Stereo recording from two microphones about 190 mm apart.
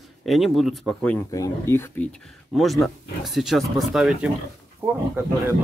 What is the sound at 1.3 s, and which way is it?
Speech, 15° left (ahead or behind).